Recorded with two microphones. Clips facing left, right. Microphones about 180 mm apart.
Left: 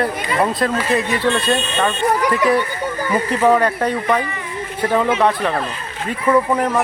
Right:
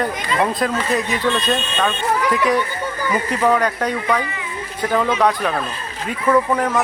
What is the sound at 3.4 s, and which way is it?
Speech, 5° left (ahead or behind).